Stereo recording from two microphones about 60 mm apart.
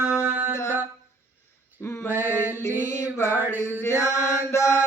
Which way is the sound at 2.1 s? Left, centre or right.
Right.